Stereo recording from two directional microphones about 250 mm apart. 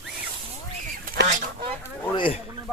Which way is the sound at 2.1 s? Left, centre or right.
Left.